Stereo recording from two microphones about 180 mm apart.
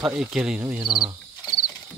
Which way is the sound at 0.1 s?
5° right (ahead or behind).